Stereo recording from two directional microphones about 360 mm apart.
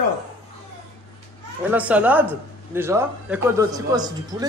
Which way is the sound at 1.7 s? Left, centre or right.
Centre.